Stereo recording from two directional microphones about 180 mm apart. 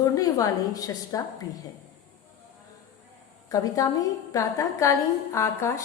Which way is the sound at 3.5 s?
20° left (ahead or behind).